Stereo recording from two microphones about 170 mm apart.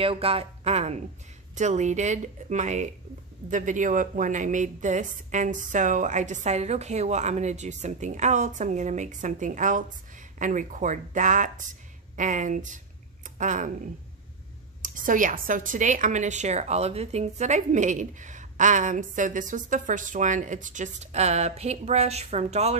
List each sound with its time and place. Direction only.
0.0 s a woman's voice: 35° right (ahead or behind)
14.8 s a woman's voice: 50° right (ahead or behind)